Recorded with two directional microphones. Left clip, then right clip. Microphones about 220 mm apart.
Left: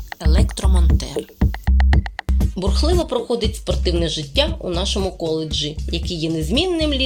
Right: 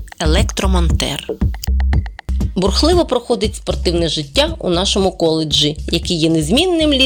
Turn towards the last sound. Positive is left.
turn(degrees=-25)  # may be behind; listen again after turning